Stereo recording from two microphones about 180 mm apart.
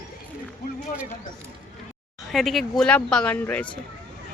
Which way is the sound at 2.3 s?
Centre (ahead or behind).